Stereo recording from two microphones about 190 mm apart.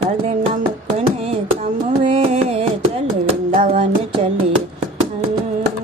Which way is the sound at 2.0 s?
30° right (ahead or behind).